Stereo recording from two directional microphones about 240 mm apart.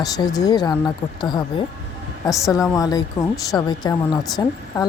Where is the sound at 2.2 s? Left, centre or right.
Centre.